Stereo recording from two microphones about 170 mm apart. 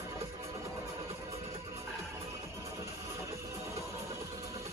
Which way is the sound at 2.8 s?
15° right (ahead or behind).